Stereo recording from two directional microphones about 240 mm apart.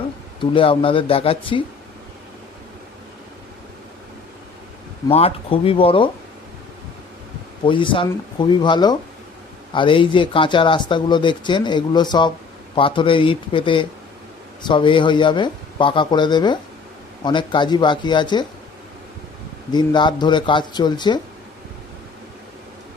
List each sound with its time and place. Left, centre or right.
0.3 s speech: left
5.0 s speech: left
7.6 s speech: left
19.7 s speech: centre